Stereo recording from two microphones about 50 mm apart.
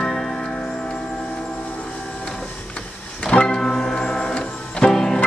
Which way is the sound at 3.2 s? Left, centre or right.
Centre.